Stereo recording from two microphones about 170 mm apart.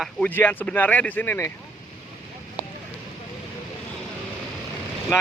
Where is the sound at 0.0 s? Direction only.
5° left (ahead or behind).